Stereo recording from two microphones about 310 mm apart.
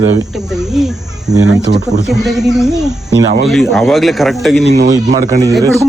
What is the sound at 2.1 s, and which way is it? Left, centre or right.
Speech, centre.